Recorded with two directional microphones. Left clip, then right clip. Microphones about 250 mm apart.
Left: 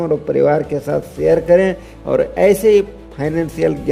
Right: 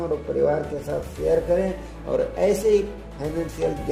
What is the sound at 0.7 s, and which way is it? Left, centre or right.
Speech, left.